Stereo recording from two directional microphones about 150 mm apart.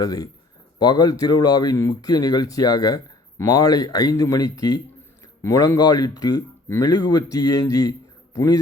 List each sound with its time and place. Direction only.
0.0 s speech: 25° left (ahead or behind)